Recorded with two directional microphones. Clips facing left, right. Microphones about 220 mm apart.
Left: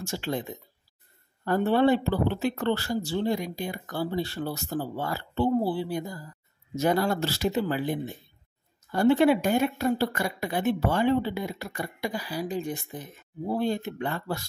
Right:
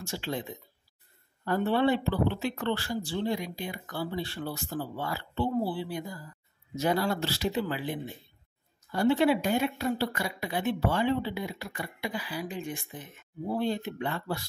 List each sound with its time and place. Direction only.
0.0 s speech: 45° left (ahead or behind)
1.4 s speech: 45° left (ahead or behind)